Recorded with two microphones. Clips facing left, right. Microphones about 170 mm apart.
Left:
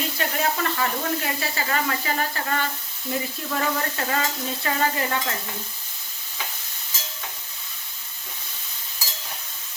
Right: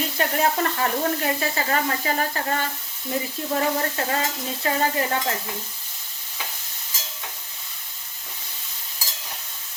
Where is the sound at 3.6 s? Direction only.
30° right (ahead or behind).